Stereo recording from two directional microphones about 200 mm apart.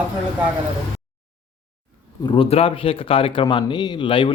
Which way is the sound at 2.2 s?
25° left (ahead or behind).